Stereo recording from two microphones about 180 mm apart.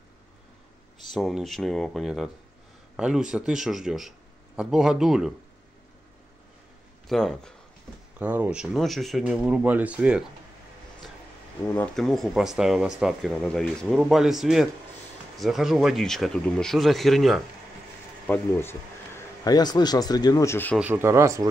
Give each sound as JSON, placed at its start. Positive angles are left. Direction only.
{"t": 1.0, "sound": "speech", "side_deg": 0}
{"t": 7.1, "sound": "speech", "side_deg": 0}
{"t": 8.2, "sound": "speech", "side_deg": -10}
{"t": 11.6, "sound": "speech", "side_deg": 10}
{"t": 20.7, "sound": "speech", "side_deg": -10}